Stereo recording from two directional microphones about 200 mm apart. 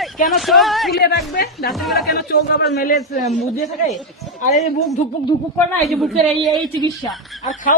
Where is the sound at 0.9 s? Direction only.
50° left (ahead or behind).